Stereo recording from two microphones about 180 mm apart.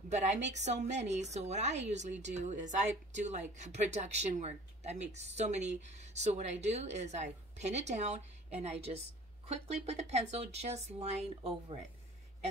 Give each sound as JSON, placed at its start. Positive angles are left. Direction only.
{"t": 0.1, "sound": "speech", "side_deg": -40}